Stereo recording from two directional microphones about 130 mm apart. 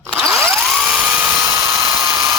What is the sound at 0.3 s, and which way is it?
Drill, 20° right (ahead or behind).